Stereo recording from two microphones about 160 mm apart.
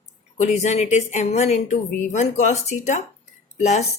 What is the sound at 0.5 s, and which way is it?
A woman's voice, 45° left (ahead or behind).